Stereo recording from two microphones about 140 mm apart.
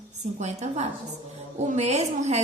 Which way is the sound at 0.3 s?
55° right (ahead or behind).